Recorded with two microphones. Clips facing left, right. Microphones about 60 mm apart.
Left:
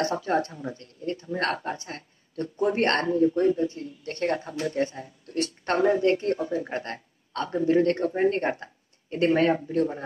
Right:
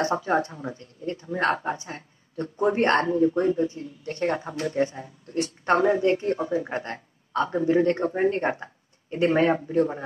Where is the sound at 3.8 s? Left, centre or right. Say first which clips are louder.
Right 1 dB; centre.